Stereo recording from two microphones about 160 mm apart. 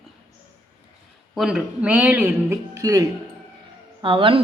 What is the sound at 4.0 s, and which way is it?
Speech, 35° right (ahead or behind).